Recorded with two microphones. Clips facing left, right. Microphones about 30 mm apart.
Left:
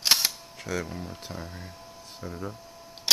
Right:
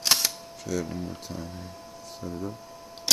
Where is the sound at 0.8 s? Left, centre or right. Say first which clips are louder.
Right 3 dB; centre.